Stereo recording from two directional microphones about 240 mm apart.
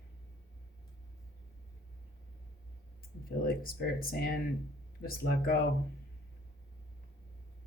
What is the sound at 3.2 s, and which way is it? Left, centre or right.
Speech, left.